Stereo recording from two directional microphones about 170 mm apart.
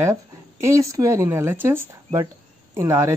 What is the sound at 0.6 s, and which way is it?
A woman's voice, 20° right (ahead or behind).